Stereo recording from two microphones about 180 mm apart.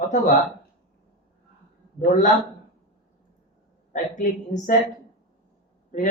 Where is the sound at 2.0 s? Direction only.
45° left (ahead or behind).